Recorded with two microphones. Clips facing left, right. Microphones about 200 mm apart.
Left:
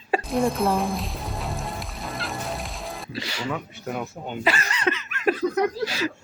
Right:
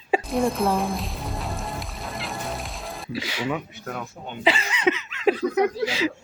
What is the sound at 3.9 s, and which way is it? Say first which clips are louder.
Speech: left 4 dB; 10° left (ahead or behind).